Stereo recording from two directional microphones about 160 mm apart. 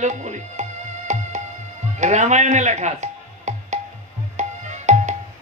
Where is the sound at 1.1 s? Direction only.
45° right (ahead or behind).